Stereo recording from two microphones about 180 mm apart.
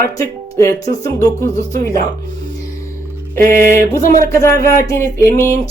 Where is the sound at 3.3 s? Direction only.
50° right (ahead or behind).